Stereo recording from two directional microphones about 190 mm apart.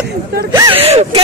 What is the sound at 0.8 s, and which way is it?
Speech, 35° right (ahead or behind).